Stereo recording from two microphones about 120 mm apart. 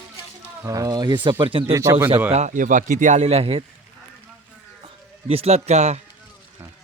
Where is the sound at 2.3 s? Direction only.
80° right; by 3.7 s 50° right (ahead or behind).